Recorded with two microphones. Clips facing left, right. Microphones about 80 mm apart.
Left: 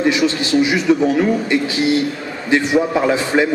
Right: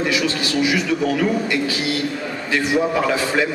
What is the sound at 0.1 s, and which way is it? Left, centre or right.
A man's voice, left.